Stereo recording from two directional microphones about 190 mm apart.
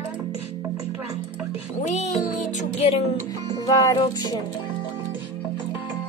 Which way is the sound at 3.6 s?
20° left (ahead or behind).